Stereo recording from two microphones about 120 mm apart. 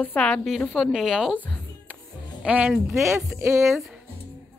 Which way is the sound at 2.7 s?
Centre (ahead or behind).